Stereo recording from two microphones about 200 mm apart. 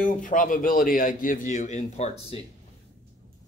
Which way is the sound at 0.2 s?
40° left (ahead or behind).